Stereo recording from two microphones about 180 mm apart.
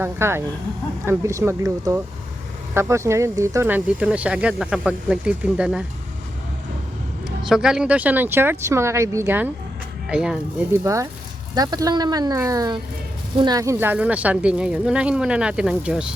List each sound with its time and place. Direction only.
0.0 s speech: 15° right (ahead or behind)
7.4 s speech: 5° right (ahead or behind)
10.8 s speech: 15° right (ahead or behind)